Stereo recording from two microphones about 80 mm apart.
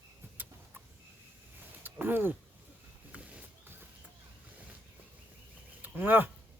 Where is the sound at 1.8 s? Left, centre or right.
Right.